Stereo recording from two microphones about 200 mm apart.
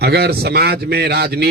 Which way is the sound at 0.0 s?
50° right (ahead or behind).